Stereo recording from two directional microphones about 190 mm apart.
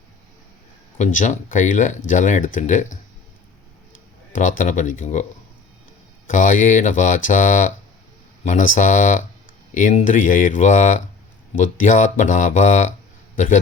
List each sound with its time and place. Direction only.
0.9 s speech: 40° left (ahead or behind)
4.4 s speech: 45° left (ahead or behind)
6.2 s a man's voice: 45° left (ahead or behind)